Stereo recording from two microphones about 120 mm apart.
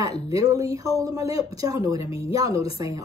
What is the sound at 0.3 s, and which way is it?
Speech, 30° right (ahead or behind).